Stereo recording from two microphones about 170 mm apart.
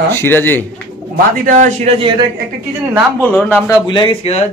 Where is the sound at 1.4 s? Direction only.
45° right (ahead or behind).